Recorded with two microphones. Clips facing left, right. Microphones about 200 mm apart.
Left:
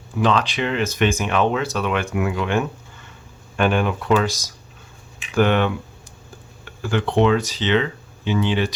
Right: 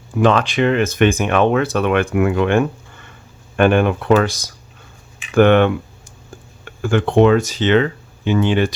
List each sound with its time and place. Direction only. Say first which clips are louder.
0.2 s speech: right 5 dB; 50° right (ahead or behind)